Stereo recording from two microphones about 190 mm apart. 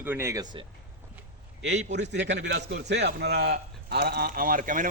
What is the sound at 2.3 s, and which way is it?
A man's voice, 65° right (ahead or behind).